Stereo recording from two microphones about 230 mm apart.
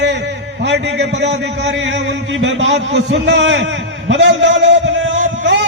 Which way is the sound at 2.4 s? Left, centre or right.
Right.